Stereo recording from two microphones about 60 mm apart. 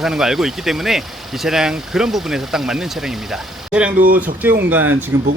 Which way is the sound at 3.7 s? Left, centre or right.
Right.